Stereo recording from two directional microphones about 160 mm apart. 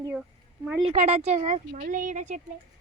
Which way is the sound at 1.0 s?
40° right (ahead or behind).